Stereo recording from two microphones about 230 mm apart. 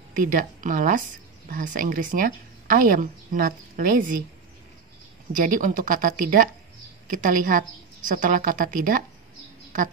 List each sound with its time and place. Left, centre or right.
0.1 s a woman's voice: right
5.3 s a woman's voice: right